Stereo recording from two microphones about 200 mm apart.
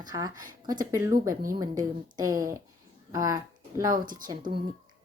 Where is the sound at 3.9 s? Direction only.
40° right (ahead or behind).